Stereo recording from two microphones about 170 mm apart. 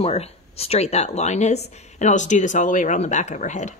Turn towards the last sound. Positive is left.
turn(degrees=45)  # may be behind; listen again after turning